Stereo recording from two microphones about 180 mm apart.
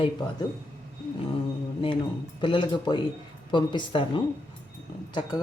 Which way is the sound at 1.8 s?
30° left (ahead or behind).